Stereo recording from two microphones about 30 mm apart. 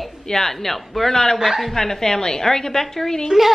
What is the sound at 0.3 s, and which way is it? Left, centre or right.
A woman's voice, centre.